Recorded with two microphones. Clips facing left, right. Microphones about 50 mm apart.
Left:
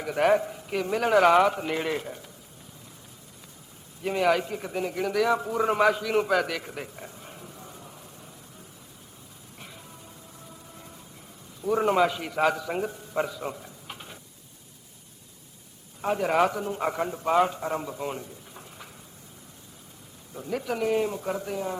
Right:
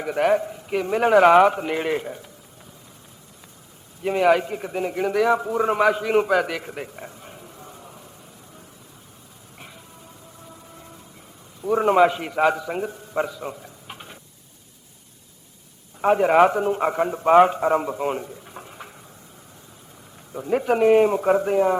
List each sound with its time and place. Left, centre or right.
0.2 s speech: centre
0.7 s a man's voice: centre
4.0 s a man's voice: centre
6.0 s a man's voice: right
6.2 s a sound: centre
11.6 s a man's voice: centre
11.9 s a man's voice: right
12.3 s a man's voice: centre
13.2 s a sound: centre
16.0 s a man's voice: right
20.3 s a man's voice: right